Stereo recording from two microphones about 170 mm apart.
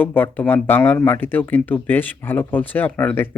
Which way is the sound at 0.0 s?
10° left (ahead or behind).